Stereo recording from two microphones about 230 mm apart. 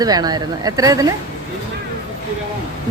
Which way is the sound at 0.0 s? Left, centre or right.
Centre.